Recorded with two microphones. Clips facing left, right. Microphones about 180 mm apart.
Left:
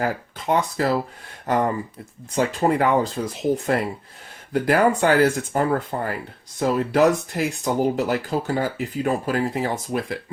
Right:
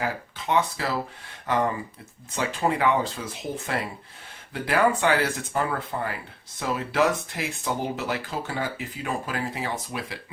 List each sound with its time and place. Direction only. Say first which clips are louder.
0.0 s speech: left 5 dB; 45° left (ahead or behind)
4.5 s speech: left 4 dB; 45° left (ahead or behind)